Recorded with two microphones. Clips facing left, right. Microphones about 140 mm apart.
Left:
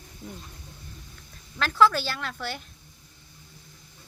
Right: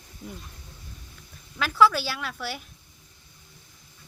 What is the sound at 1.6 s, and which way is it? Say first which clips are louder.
A woman's voice: right 1 dB; 5° right (ahead or behind).